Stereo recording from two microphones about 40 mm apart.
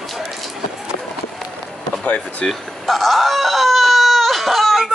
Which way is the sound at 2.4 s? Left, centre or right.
Centre.